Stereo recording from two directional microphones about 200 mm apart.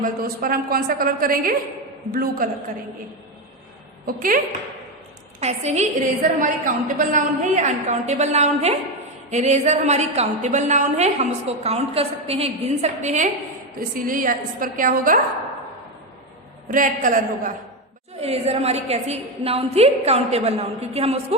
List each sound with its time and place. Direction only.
0.0 s a woman's voice: 45° right (ahead or behind)
4.0 s a woman's voice: 45° right (ahead or behind)
5.4 s a woman's voice: 35° right (ahead or behind)
16.6 s a woman's voice: 40° right (ahead or behind)
18.2 s a woman's voice: 30° right (ahead or behind)